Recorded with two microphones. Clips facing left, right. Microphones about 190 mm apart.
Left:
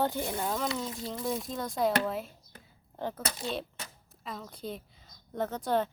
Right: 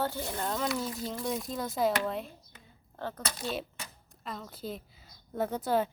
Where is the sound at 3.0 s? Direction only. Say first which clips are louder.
Left 2 dB; 15° left (ahead or behind).